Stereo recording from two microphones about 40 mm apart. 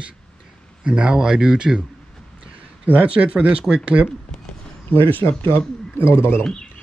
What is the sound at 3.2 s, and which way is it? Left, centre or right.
Speech, right.